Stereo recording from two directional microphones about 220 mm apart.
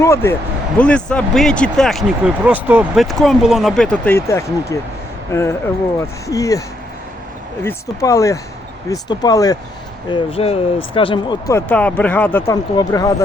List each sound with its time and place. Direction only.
0.0 s speech: 10° left (ahead or behind)
7.6 s speech: 10° left (ahead or behind)
10.1 s speech: 25° left (ahead or behind)